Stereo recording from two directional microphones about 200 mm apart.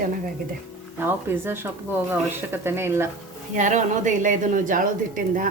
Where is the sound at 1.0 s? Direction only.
10° right (ahead or behind).